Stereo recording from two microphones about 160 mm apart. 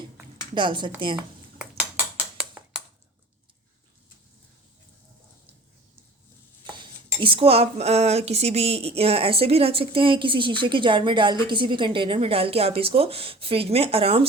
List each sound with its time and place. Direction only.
0.5 s a woman's voice: 30° right (ahead or behind)
6.7 s speech: 30° right (ahead or behind)